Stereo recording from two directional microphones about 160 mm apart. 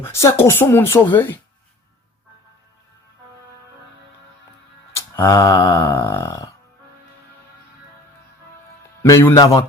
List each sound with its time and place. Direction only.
0.0 s speech: 15° left (ahead or behind)
4.9 s a sound: 15° left (ahead or behind)
6.2 s speech: 20° left (ahead or behind)
9.0 s a man's voice: 20° left (ahead or behind)